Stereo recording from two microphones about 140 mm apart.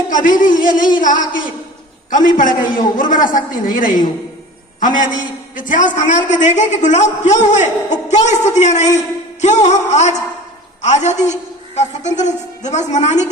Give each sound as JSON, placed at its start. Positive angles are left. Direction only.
{"t": 0.1, "sound": "a man's voice", "side_deg": 70}